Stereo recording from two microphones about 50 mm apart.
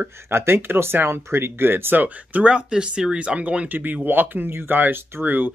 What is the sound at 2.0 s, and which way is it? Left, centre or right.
Speech, right.